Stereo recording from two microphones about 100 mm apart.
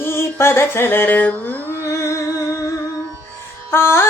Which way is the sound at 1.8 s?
30° left (ahead or behind).